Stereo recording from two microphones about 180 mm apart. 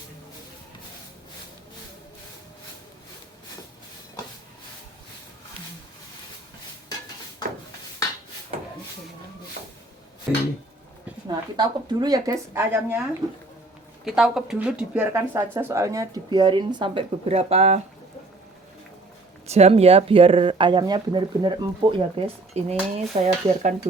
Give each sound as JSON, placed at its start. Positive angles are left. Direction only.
{"t": 10.3, "sound": "a sound", "side_deg": -5}
{"t": 11.3, "sound": "speech", "side_deg": -20}
{"t": 14.0, "sound": "speech", "side_deg": 0}
{"t": 19.5, "sound": "speech", "side_deg": -35}